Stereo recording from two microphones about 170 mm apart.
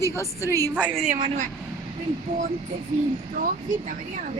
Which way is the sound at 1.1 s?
45° right (ahead or behind).